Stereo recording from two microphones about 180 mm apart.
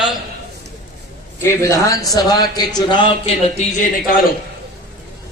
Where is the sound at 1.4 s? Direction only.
15° left (ahead or behind).